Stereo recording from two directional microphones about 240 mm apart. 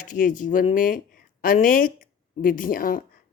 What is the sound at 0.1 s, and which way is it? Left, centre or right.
Speech, left.